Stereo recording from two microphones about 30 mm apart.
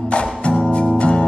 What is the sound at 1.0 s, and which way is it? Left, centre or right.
Music, left.